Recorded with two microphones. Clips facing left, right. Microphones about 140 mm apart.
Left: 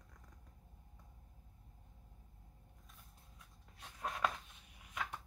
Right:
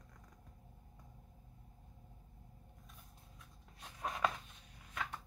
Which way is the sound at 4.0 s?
Centre (ahead or behind).